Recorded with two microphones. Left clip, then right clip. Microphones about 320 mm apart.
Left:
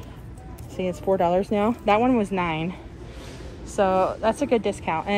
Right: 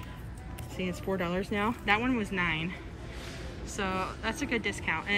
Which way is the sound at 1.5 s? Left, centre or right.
Centre.